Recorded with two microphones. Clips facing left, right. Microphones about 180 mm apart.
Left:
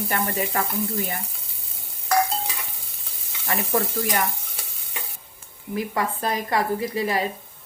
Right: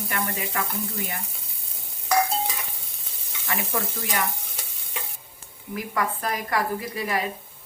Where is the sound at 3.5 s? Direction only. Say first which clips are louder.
Left 4 dB; 40° left (ahead or behind).